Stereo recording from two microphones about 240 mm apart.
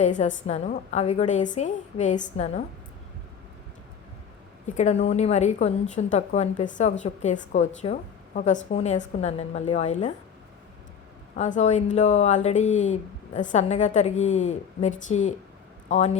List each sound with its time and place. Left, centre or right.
0.0 s speech: left
4.6 s speech: left
11.3 s speech: left